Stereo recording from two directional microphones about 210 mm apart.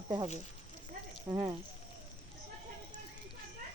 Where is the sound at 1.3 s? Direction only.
15° right (ahead or behind).